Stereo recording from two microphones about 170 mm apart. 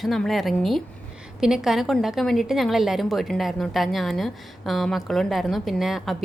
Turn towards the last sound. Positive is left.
turn(degrees=0)  # may be behind; listen again after turning